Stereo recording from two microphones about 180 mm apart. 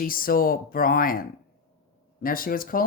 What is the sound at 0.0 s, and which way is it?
Speech, 50° left (ahead or behind).